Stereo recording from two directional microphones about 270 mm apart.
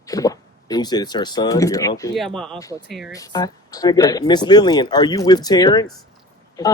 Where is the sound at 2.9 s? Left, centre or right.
Centre.